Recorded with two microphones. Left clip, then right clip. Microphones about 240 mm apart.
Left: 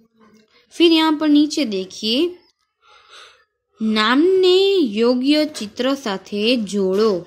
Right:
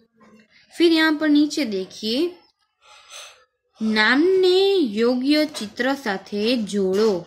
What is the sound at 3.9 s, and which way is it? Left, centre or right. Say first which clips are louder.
A woman's voice: left 2 dB; centre.